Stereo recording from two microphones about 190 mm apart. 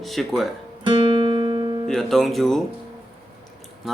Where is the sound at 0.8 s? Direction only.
25° right (ahead or behind).